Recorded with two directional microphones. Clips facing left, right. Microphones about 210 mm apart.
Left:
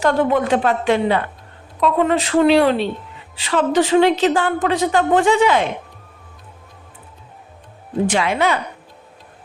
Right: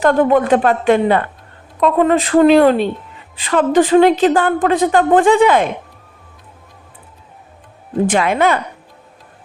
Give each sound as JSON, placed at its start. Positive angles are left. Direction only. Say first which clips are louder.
{"t": 0.0, "sound": "a woman's voice", "louder": "right 4 dB", "side_deg": -50}
{"t": 8.1, "sound": "a woman's voice", "louder": "right 4 dB", "side_deg": -50}